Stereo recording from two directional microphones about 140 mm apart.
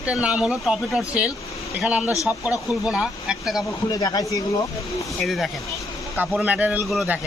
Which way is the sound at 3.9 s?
25° left (ahead or behind).